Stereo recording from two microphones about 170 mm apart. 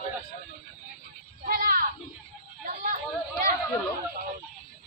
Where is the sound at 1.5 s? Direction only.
60° right (ahead or behind).